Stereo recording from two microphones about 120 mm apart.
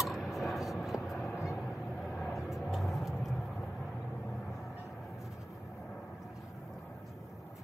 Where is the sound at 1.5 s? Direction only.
Centre (ahead or behind).